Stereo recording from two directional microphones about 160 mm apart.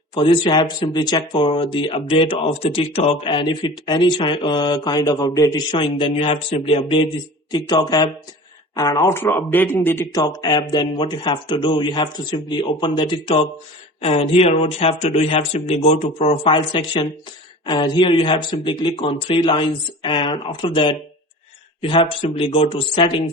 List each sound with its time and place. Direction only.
0.1 s a man's voice: 30° left (ahead or behind)